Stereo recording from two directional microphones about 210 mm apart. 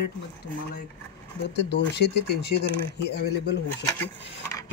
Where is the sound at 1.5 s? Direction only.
55° left (ahead or behind).